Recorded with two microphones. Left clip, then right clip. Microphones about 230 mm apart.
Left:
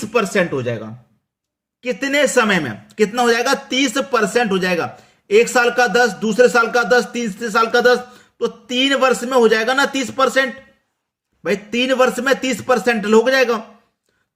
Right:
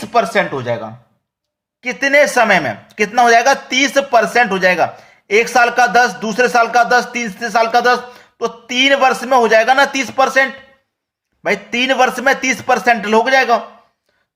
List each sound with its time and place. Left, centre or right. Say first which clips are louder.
1.8 s a man's voice: right 5 dB; centre